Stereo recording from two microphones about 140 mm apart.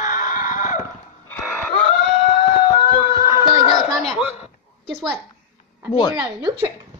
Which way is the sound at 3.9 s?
Centre (ahead or behind).